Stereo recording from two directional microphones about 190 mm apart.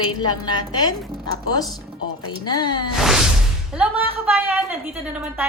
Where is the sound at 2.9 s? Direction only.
Centre (ahead or behind).